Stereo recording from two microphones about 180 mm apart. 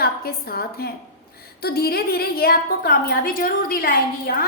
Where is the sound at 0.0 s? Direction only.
60° left (ahead or behind).